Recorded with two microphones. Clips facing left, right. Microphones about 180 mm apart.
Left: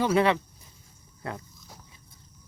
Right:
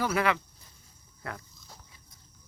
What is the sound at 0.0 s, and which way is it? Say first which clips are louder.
Speech: left 5 dB; 25° left (ahead or behind).